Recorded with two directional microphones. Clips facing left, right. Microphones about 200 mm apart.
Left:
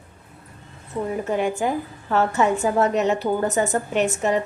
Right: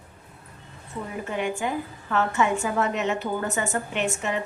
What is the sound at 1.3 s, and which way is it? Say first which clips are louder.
A woman's voice: left 4 dB; 40° left (ahead or behind).